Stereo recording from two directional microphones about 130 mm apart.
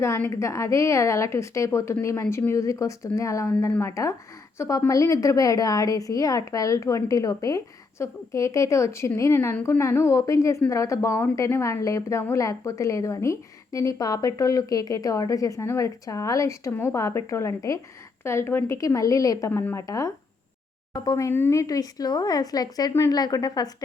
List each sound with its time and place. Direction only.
0.0 s a woman's voice: 20° left (ahead or behind)